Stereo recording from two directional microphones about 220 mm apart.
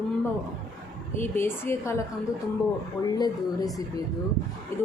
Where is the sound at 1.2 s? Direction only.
10° left (ahead or behind).